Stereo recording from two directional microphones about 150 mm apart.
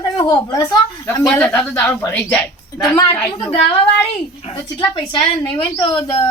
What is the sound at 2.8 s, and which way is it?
Speech, 25° left (ahead or behind).